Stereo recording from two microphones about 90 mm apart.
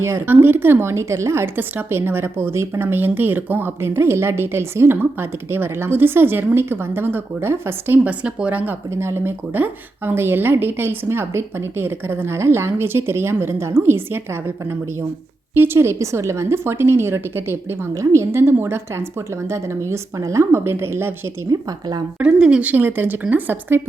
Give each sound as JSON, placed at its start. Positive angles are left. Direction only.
{"t": 0.0, "sound": "speech", "side_deg": -25}
{"t": 8.9, "sound": "a woman's voice", "side_deg": -30}
{"t": 21.5, "sound": "speech", "side_deg": -50}
{"t": 22.2, "sound": "speech", "side_deg": -10}